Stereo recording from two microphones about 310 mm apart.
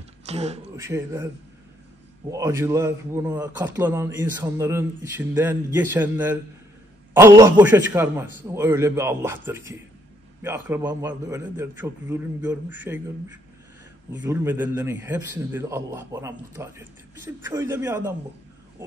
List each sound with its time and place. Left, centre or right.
0.3 s speech: right
0.7 s a man's voice: centre
2.3 s a man's voice: centre
10.4 s a man's voice: centre
14.2 s a man's voice: centre